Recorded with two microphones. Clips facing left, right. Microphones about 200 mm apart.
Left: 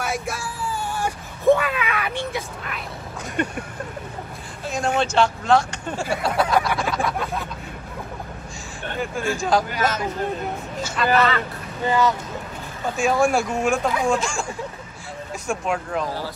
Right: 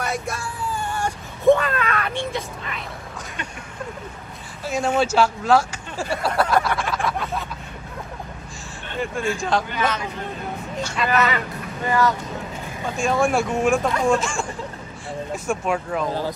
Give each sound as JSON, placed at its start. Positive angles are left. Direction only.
{"t": 0.0, "sound": "a sound", "side_deg": 5}
{"t": 3.4, "sound": "speech", "side_deg": 55}
{"t": 4.6, "sound": "speech", "side_deg": -5}
{"t": 5.9, "sound": "a sound", "side_deg": 0}
{"t": 9.0, "sound": "speech", "side_deg": 0}
{"t": 10.8, "sound": "speech", "side_deg": 5}
{"t": 11.8, "sound": "speech", "side_deg": 20}
{"t": 12.9, "sound": "speech", "side_deg": 0}